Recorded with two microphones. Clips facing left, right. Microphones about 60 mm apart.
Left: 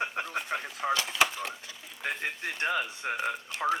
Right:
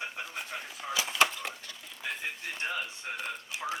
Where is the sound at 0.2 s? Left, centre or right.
Left.